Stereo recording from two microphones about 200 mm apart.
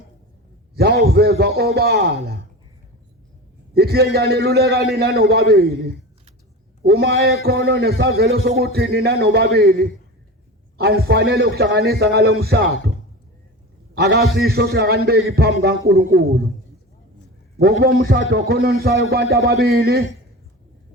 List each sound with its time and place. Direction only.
0.8 s a man's voice: 50° right (ahead or behind)
3.8 s a man's voice: 50° right (ahead or behind)
6.8 s a man's voice: 50° right (ahead or behind)
7.9 s a man's voice: 80° right
8.3 s a man's voice: 55° right (ahead or behind)
13.9 s a man's voice: 55° right (ahead or behind)
17.6 s a man's voice: 50° right (ahead or behind)